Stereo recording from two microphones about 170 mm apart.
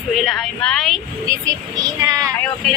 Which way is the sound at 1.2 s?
20° right (ahead or behind).